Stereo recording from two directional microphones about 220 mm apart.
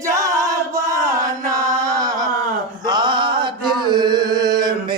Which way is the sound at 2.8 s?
20° right (ahead or behind).